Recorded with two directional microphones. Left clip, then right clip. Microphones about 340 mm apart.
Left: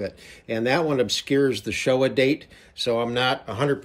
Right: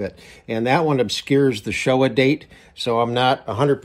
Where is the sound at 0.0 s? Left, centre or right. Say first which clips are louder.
Right 3 dB; centre.